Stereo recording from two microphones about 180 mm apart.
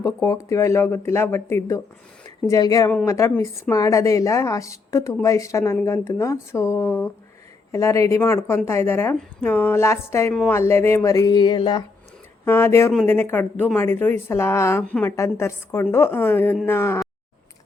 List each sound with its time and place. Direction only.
0.0 s a woman's voice: 15° left (ahead or behind)
12.5 s a woman's voice: 15° left (ahead or behind)